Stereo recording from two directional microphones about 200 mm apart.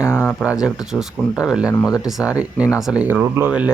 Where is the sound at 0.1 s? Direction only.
15° left (ahead or behind).